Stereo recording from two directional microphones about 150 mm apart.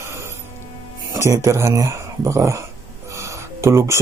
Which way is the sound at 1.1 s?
20° right (ahead or behind).